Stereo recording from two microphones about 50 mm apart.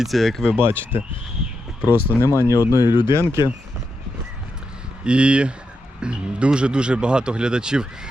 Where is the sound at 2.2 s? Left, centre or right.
Left.